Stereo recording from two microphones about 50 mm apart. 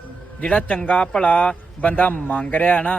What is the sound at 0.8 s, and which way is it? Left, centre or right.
A man's voice, left.